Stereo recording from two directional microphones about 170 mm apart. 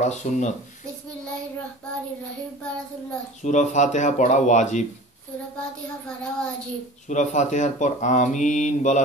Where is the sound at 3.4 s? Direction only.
45° left (ahead or behind).